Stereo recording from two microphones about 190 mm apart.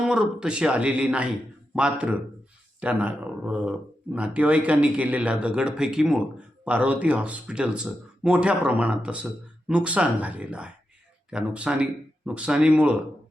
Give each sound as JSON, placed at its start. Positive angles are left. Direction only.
{"t": 0.0, "sound": "speech", "side_deg": -5}